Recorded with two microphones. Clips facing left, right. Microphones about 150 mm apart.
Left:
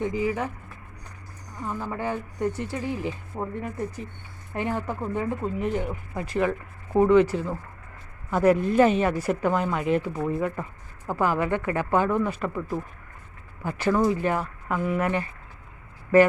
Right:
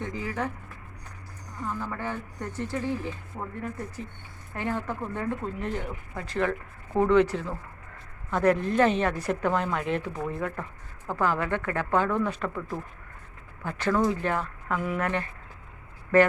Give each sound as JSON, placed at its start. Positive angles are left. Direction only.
{"t": 0.0, "sound": "speech", "side_deg": 10}
{"t": 1.6, "sound": "speech", "side_deg": 15}
{"t": 3.3, "sound": "speech", "side_deg": 30}
{"t": 4.5, "sound": "speech", "side_deg": 15}